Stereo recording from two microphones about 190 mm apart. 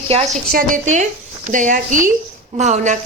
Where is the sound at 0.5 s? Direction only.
45° right (ahead or behind).